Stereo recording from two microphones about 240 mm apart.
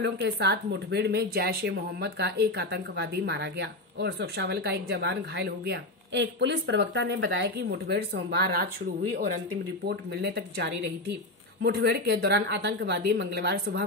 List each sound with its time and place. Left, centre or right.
0.0 s speech: right
9.8 s speech: right